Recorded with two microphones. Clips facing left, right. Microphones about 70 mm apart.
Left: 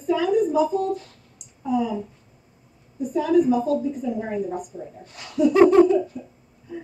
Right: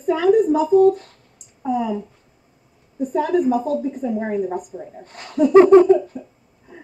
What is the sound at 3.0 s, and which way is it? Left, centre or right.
A woman's voice, right.